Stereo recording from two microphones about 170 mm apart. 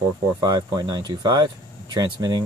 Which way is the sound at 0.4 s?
25° right (ahead or behind).